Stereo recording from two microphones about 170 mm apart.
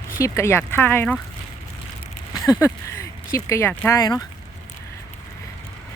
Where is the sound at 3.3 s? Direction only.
15° left (ahead or behind).